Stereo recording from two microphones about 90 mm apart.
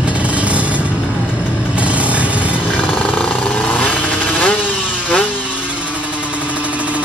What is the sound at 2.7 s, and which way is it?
Jackhammer, 15° left (ahead or behind).